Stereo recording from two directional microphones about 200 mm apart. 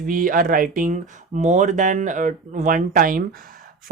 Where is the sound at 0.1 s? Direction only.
45° right (ahead or behind).